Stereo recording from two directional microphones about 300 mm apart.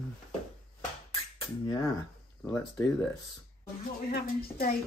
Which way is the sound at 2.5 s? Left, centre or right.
Centre.